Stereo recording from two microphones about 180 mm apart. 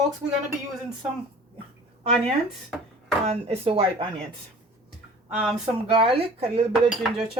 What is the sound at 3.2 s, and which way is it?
Speech, 35° right (ahead or behind).